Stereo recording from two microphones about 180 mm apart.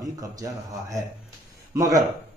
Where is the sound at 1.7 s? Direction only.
20° right (ahead or behind).